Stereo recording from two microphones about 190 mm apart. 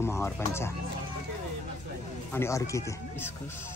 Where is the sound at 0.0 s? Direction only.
15° left (ahead or behind).